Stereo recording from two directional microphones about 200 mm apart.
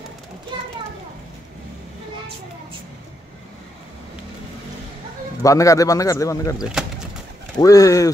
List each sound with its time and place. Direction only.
0.5 s children playing: 25° right (ahead or behind)
5.4 s a man's voice: 15° left (ahead or behind)
6.6 s speech: 5° right (ahead or behind)
7.5 s a man's voice: 15° left (ahead or behind)